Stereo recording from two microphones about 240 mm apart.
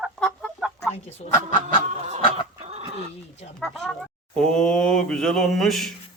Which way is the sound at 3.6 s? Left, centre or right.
Centre.